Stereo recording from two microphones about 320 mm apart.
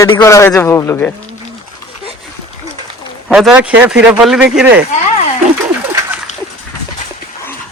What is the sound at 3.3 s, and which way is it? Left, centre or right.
Speech, centre.